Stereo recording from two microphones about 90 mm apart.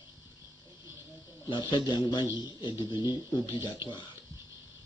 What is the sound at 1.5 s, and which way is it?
Speech, 60° left (ahead or behind).